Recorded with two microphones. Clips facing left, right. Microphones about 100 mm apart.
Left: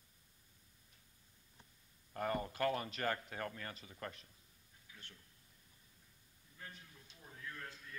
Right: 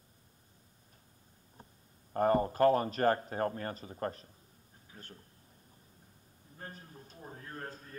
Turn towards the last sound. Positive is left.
turn(degrees=-40)  # may be behind; listen again after turning